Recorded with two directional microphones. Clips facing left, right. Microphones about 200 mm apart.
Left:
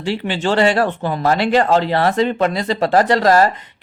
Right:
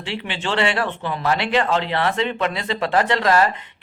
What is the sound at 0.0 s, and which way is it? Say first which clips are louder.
Speech: left 7 dB; 40° left (ahead or behind).